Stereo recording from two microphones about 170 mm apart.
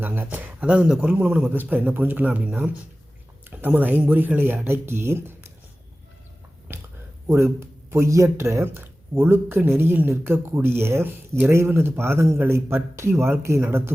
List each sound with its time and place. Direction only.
0.0 s speech: 10° right (ahead or behind)
6.7 s a sound: 15° right (ahead or behind)
7.3 s speech: 15° right (ahead or behind)